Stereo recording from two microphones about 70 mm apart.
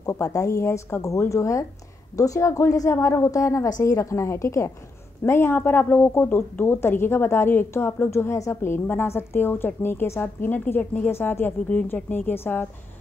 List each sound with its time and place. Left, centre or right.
0.0 s a woman's voice: left